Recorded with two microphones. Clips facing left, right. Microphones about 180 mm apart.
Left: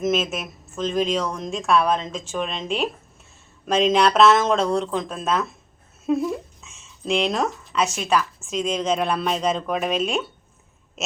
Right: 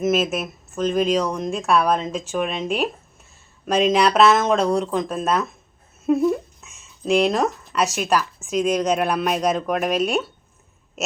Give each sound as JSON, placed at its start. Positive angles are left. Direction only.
{"t": 0.0, "sound": "speech", "side_deg": -5}
{"t": 6.1, "sound": "a sound", "side_deg": -5}
{"t": 8.4, "sound": "speech", "side_deg": -10}